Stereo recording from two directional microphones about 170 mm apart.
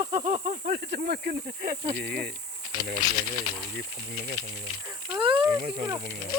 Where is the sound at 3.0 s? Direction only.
25° left (ahead or behind).